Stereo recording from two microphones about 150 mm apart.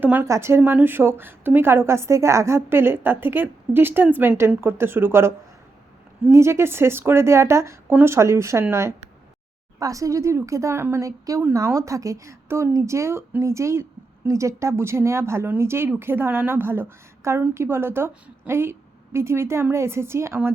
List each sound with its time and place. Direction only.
0.0 s speech: 10° right (ahead or behind)